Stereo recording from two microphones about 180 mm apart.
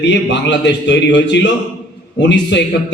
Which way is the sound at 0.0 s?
75° left (ahead or behind).